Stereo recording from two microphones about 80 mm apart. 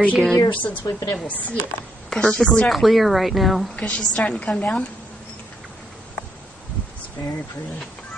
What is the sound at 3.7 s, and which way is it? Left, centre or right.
A woman's voice, centre.